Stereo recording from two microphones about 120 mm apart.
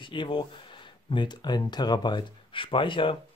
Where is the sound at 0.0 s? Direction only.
45° left (ahead or behind).